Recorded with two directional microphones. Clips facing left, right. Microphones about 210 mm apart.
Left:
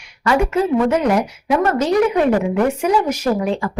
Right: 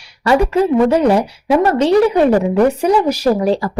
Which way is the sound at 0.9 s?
30° right (ahead or behind).